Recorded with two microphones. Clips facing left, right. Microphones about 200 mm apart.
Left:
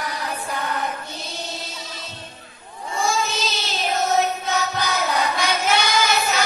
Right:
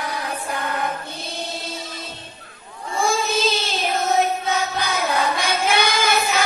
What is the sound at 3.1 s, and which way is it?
Child singing, 50° right (ahead or behind).